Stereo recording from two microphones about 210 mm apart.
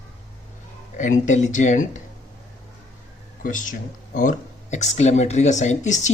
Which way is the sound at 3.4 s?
40° left (ahead or behind).